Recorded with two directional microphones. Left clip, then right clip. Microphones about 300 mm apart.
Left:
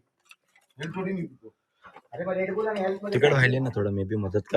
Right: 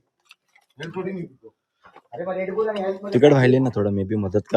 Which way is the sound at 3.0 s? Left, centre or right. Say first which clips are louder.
Right 7 dB; centre.